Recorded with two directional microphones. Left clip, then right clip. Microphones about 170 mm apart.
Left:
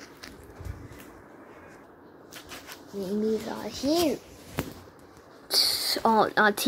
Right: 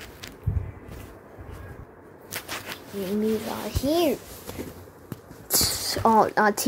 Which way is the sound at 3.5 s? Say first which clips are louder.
Right 2 dB; centre (ahead or behind).